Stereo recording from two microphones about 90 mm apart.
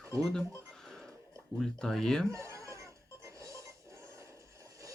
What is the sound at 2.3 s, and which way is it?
Goat, 35° right (ahead or behind).